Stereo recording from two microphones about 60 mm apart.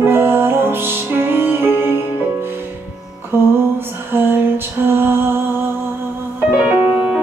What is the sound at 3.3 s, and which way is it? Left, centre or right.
Music, right.